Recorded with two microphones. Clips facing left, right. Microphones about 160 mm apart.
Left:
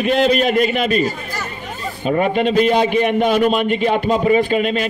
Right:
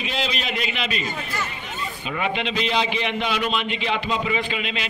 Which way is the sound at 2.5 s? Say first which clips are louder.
Left 11 dB; 50° left (ahead or behind).